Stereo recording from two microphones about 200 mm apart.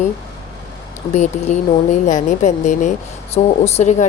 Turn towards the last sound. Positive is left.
turn(degrees=35)  # may be behind; listen again after turning